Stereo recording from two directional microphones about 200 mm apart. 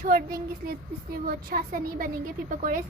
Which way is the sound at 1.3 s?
45° right (ahead or behind).